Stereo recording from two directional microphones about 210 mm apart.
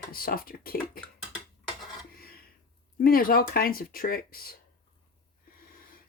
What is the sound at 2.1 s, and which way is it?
Gasp, 45° left (ahead or behind).